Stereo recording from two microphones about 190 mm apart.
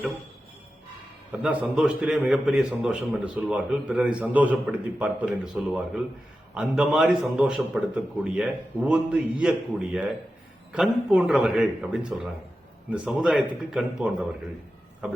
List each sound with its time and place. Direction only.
1.3 s a man's voice: 5° right (ahead or behind)